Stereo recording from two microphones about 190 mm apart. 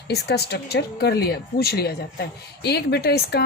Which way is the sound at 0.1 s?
60° left (ahead or behind).